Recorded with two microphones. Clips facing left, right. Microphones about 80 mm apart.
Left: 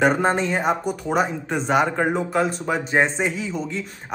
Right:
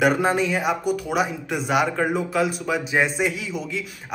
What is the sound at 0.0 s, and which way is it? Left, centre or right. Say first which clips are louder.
A man's voice: left 1 dB; left.